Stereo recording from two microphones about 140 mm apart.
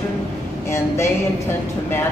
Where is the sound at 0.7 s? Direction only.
20° left (ahead or behind).